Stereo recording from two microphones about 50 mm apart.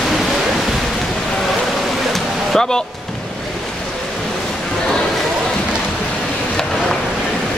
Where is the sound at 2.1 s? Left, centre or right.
Centre.